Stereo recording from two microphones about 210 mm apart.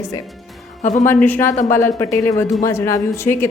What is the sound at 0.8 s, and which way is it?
Speech, 35° left (ahead or behind).